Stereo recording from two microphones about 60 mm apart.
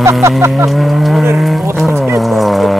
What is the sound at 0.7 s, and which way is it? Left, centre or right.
Livestock, centre.